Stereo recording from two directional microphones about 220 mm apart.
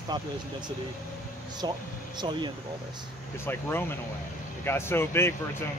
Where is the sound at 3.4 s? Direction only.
10° left (ahead or behind).